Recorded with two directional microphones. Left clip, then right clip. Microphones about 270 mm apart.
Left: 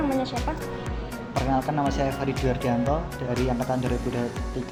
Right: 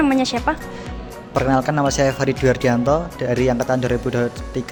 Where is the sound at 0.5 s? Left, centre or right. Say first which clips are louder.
Right 8 dB; right.